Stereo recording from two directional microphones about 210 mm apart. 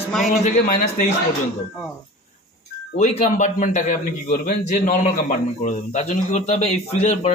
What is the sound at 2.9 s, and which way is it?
A man's voice, 35° left (ahead or behind).